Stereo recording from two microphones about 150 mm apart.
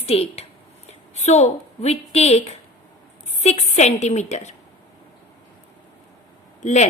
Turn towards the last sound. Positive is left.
turn(degrees=50)  # may be behind; listen again after turning